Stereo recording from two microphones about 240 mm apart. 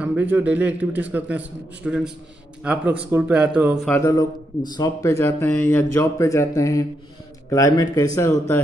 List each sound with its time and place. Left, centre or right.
0.0 s a man's voice: centre
3.9 s speech: centre